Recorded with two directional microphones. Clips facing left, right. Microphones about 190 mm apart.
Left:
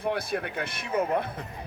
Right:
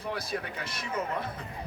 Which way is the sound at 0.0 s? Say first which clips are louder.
Left 5 dB; 55° left (ahead or behind).